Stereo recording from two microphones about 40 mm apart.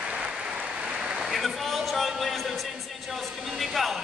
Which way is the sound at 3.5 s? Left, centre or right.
Centre.